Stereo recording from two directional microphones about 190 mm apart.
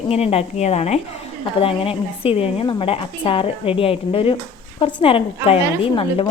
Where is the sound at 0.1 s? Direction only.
30° left (ahead or behind).